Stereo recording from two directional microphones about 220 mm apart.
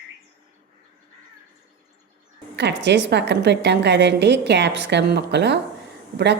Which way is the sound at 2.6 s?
50° right (ahead or behind).